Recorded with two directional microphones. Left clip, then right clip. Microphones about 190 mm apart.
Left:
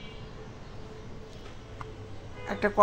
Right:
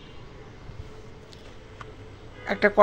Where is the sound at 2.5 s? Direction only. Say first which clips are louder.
Right 7 dB; 20° right (ahead or behind).